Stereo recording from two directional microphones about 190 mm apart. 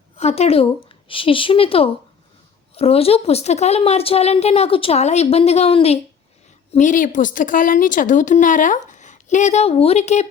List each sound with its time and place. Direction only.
0.2 s a woman's voice: 35° left (ahead or behind)